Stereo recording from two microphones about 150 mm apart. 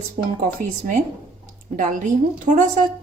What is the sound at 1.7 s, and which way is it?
Speech, 60° right (ahead or behind).